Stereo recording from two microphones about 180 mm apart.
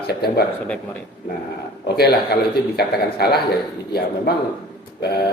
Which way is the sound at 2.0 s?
60° left (ahead or behind).